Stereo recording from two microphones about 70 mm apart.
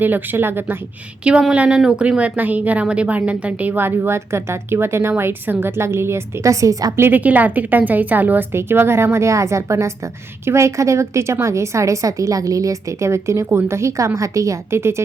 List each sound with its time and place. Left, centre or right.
0.0 s speech: right
1.2 s a woman's voice: centre; by 6.9 s right
6.9 s a woman's voice: right
14.8 s speech: right